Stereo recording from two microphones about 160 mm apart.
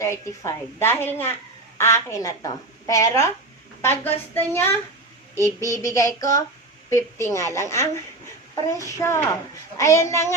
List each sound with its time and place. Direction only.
0.0 s a woman's voice: 20° left (ahead or behind)